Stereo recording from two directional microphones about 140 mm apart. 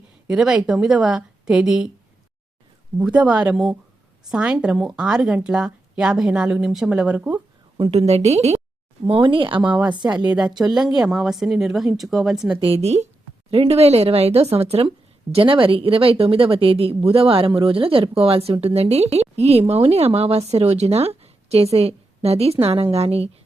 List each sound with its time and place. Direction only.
0.3 s a woman's voice: 5° right (ahead or behind)
3.0 s a woman's voice: 10° right (ahead or behind)
7.8 s speech: 45° right (ahead or behind)
9.0 s speech: 40° right (ahead or behind)
10.1 s a woman's voice: 10° right (ahead or behind)
12.5 s speech: 40° right (ahead or behind)